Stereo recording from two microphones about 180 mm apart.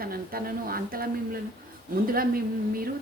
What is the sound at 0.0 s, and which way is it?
A woman's voice, 55° right (ahead or behind).